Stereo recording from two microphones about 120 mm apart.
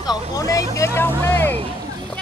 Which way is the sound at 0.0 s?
30° left (ahead or behind).